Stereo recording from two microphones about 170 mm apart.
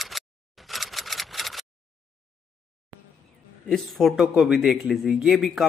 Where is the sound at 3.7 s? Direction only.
Centre (ahead or behind).